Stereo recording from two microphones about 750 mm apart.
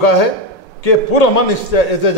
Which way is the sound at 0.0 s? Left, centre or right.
Left.